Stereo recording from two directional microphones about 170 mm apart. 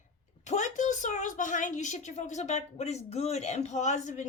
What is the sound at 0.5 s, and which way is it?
A woman's voice, 45° left (ahead or behind).